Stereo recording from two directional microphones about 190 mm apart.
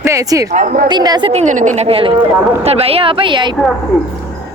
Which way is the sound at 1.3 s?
40° right (ahead or behind).